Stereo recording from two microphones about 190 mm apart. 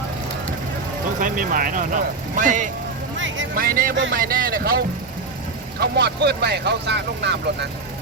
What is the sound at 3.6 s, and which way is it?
Speech, 50° right (ahead or behind).